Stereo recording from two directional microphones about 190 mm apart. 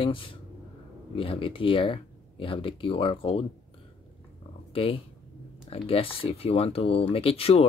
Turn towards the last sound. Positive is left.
turn(degrees=30)  # may be behind; listen again after turning